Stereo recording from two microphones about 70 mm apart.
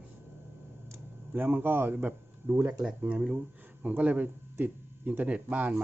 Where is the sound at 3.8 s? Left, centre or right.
Centre.